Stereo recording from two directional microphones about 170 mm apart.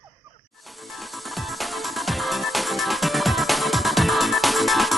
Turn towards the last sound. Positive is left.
turn(degrees=0)  # may be behind; listen again after turning